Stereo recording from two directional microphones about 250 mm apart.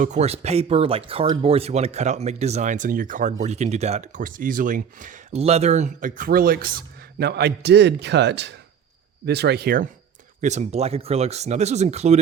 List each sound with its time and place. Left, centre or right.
0.0 s speech: right